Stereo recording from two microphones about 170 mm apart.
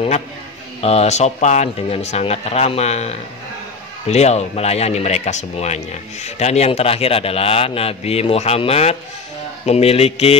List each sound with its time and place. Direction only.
0.7 s a man's voice: 40° left (ahead or behind)